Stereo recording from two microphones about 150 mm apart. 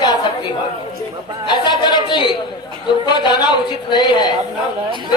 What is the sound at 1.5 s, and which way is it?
Speech, 30° left (ahead or behind).